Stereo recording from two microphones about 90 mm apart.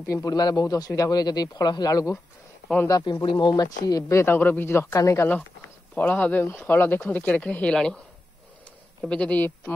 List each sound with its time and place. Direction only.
0.1 s speech: 45° left (ahead or behind)
3.1 s speech: 60° left (ahead or behind); by 4.4 s 30° left (ahead or behind)
4.4 s speech: 20° left (ahead or behind)
5.9 s speech: 20° left (ahead or behind)
9.1 s a man's voice: 15° left (ahead or behind)